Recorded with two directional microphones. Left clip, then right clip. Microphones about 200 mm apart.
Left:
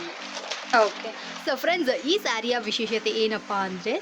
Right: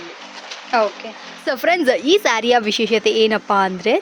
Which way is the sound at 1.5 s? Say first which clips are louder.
Right 8 dB; 15° right (ahead or behind).